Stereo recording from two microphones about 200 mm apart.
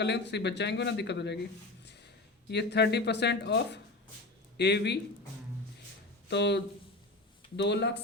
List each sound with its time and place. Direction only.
0.0 s speech: 60° left (ahead or behind)
2.5 s speech: 55° left (ahead or behind)
6.3 s speech: 60° left (ahead or behind)